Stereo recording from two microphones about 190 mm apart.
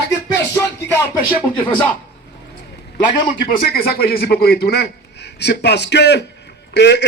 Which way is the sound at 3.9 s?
55° left (ahead or behind).